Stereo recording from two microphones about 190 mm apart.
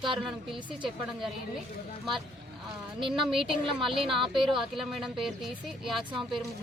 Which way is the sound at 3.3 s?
Centre (ahead or behind).